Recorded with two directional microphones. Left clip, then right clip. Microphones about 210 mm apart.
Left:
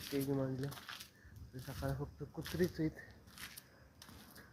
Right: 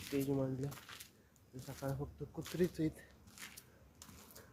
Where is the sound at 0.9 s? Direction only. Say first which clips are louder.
Left 4 dB; 15° left (ahead or behind).